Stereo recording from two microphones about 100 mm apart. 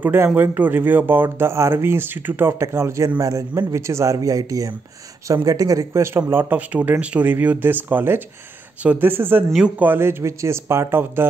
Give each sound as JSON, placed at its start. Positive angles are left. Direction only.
{"t": 0.0, "sound": "speech", "side_deg": -20}